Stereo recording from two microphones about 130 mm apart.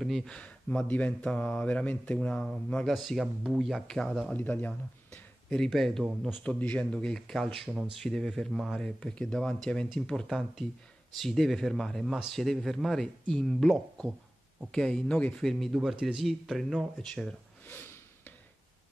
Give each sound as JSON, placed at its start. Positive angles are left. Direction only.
{"t": 0.0, "sound": "speech", "side_deg": 0}
{"t": 6.4, "sound": "speech", "side_deg": 10}
{"t": 17.6, "sound": "a sound", "side_deg": 15}